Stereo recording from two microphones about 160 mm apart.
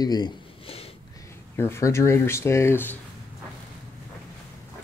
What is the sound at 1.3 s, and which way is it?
Speech, 15° left (ahead or behind).